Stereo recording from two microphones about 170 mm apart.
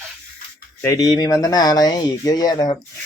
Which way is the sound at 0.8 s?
20° left (ahead or behind).